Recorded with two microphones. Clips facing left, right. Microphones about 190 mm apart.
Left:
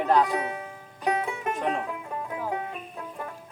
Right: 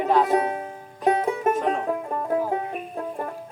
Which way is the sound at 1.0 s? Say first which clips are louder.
Right 7 dB; 40° right (ahead or behind).